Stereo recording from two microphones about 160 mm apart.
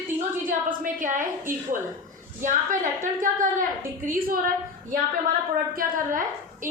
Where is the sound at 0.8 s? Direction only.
55° right (ahead or behind).